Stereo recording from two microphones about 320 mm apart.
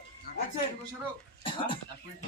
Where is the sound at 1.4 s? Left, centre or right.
Centre.